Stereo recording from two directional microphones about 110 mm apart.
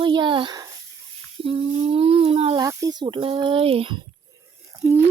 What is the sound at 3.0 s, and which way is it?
Speech, 50° right (ahead or behind).